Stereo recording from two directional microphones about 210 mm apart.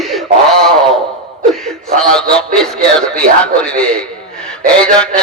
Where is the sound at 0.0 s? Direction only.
Centre (ahead or behind).